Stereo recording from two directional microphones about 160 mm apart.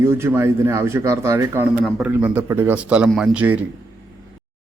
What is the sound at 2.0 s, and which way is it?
A man's voice, 10° right (ahead or behind).